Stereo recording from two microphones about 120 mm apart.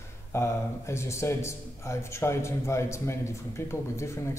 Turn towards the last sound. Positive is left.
turn(degrees=25)  # may be behind; listen again after turning